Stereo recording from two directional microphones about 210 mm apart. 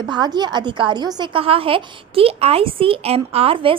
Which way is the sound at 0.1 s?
20° right (ahead or behind).